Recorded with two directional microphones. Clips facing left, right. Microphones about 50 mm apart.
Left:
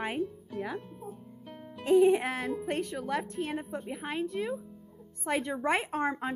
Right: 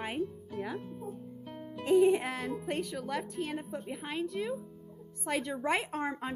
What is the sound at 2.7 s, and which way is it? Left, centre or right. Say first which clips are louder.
Music: left 2 dB; left.